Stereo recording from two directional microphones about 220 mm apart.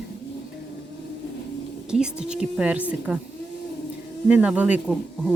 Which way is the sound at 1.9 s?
5° right (ahead or behind).